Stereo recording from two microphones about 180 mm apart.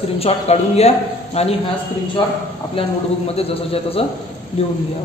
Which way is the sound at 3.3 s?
35° left (ahead or behind).